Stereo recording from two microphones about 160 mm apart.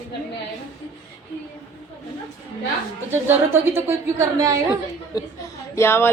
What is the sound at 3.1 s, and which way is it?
A woman's voice, 15° right (ahead or behind).